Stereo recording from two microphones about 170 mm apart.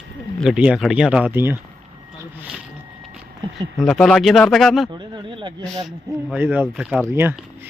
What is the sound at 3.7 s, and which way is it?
Speech, centre (ahead or behind).